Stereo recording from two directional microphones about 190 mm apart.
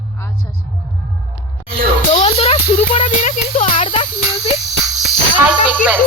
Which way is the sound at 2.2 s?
35° left (ahead or behind).